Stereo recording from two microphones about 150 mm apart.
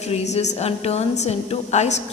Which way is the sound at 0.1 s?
45° left (ahead or behind).